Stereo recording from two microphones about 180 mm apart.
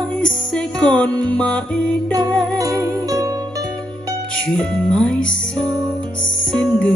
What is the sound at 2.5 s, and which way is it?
Music, 20° right (ahead or behind).